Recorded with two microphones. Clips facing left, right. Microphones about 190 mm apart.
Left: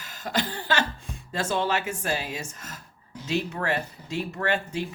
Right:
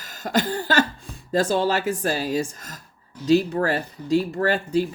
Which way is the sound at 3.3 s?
35° right (ahead or behind).